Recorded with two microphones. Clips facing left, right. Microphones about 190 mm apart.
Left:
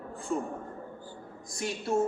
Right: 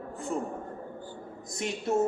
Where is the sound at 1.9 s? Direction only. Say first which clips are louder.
Right 1 dB; 20° right (ahead or behind).